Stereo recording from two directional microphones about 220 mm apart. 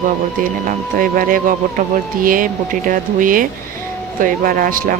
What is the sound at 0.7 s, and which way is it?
Speech, 40° right (ahead or behind).